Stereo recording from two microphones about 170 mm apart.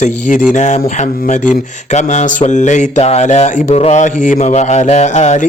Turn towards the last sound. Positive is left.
turn(degrees=45)  # may be behind; listen again after turning